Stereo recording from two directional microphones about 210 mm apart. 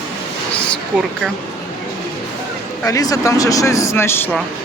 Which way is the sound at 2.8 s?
15° left (ahead or behind).